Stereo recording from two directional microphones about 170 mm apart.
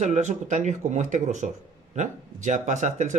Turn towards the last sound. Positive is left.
turn(degrees=-45)  # may be behind; listen again after turning